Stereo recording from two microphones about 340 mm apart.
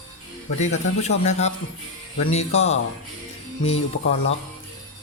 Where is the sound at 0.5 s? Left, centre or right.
Centre.